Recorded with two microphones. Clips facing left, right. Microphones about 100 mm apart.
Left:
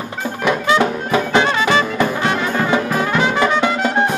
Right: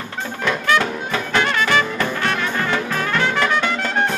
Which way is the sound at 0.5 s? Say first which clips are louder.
Left 4 dB; 20° left (ahead or behind).